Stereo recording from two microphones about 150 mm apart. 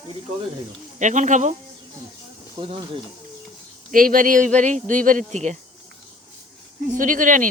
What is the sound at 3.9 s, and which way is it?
Speech, 70° right (ahead or behind).